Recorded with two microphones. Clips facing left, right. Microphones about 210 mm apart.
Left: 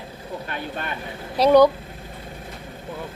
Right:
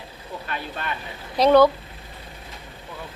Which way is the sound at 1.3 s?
10° left (ahead or behind).